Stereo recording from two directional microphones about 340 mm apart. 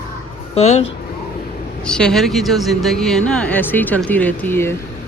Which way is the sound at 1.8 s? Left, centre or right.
Centre.